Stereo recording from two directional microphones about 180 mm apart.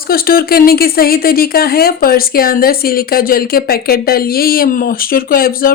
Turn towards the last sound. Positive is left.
turn(degrees=55)  # may be behind; listen again after turning